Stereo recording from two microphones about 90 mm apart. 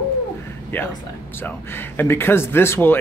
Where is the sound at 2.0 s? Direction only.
25° left (ahead or behind).